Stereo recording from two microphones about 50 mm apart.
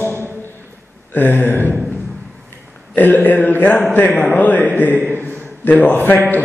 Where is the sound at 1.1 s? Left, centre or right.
Left.